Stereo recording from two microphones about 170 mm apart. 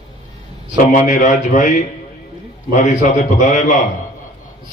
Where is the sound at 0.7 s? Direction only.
50° left (ahead or behind).